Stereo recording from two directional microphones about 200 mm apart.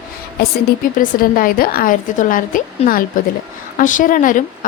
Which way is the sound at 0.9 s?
45° left (ahead or behind).